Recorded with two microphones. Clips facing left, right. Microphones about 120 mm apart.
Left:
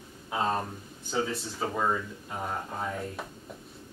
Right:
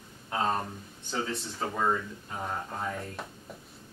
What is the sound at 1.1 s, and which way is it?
Speech, 5° left (ahead or behind).